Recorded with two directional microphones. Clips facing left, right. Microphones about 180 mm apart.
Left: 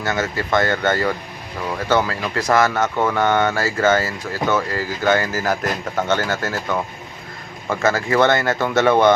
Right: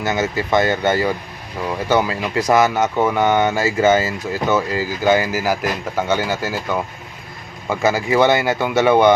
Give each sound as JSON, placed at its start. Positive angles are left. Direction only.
{"t": 0.0, "sound": "speech", "side_deg": -15}
{"t": 7.7, "sound": "speech", "side_deg": -15}